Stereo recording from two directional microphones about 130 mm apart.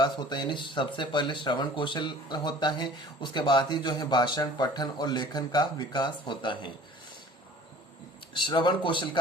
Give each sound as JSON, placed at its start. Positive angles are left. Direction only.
{"t": 0.0, "sound": "speech", "side_deg": 35}
{"t": 8.4, "sound": "speech", "side_deg": 35}